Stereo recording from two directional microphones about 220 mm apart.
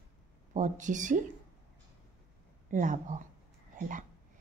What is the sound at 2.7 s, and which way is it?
Speech, 35° right (ahead or behind).